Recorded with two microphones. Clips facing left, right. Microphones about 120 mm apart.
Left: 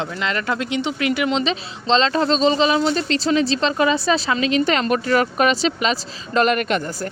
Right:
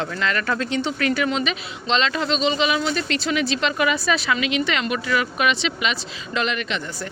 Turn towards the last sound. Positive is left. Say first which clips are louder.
# left 7 dB
turn(degrees=50)  # may be behind; listen again after turning